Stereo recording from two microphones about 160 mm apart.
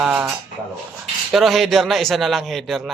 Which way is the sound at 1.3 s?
Centre (ahead or behind).